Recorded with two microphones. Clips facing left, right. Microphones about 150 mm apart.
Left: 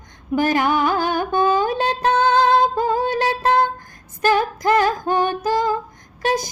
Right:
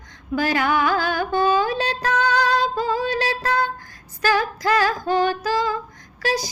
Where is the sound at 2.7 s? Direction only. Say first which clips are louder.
Left 3 dB; 50° left (ahead or behind).